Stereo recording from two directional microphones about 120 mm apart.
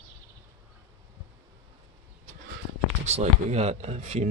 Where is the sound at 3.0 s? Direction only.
65° right (ahead or behind).